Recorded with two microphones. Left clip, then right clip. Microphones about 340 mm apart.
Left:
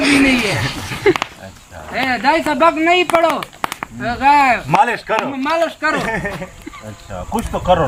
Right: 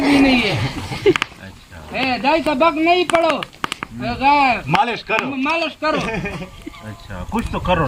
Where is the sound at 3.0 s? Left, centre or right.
Centre.